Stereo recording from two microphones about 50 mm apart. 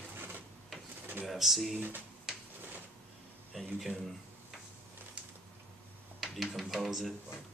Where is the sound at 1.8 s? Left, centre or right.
Right.